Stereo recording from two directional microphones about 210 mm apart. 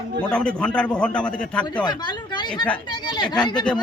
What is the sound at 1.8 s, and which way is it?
Speech, 20° left (ahead or behind).